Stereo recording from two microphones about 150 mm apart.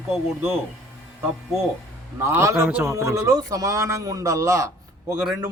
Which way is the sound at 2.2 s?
20° right (ahead or behind).